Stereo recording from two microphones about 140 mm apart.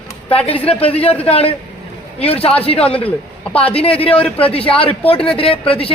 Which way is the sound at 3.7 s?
45° left (ahead or behind).